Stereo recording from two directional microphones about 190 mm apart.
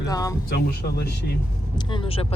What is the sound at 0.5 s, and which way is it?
Speech, 60° left (ahead or behind).